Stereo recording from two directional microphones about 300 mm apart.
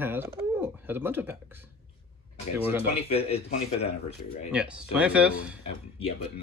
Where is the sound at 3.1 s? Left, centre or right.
Centre.